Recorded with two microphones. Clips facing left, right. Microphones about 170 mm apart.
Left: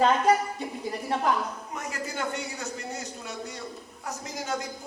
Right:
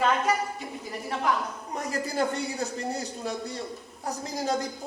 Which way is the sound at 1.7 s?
35° right (ahead or behind).